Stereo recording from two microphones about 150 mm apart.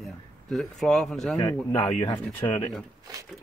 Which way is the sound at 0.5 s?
5° left (ahead or behind).